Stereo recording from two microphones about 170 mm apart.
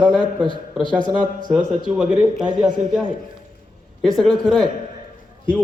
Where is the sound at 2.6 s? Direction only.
50° right (ahead or behind).